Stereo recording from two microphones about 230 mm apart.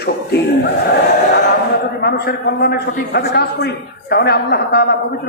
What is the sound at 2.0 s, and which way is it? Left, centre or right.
A man's voice, left.